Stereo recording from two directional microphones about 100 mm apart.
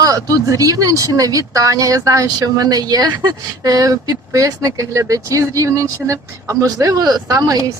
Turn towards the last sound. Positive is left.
turn(degrees=-35)  # may be behind; listen again after turning